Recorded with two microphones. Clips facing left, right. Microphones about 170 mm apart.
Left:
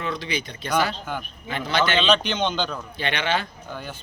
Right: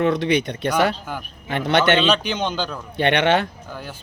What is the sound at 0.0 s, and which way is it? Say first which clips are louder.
A man's voice: right 10 dB; 70° right (ahead or behind).